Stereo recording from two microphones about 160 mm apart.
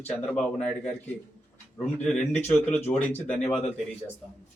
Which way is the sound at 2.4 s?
10° left (ahead or behind).